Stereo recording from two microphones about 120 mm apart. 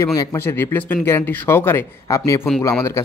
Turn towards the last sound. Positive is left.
turn(degrees=25)  # may be behind; listen again after turning